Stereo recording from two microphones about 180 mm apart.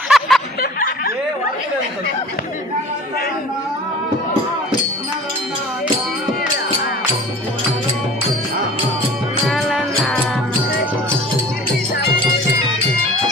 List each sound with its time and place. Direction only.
0.1 s a sound: centre (ahead or behind)
0.6 s snicker: 55° left (ahead or behind)
9.5 s music: centre (ahead or behind)